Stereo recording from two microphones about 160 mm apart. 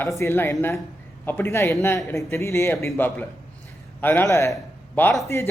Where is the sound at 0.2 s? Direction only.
15° left (ahead or behind).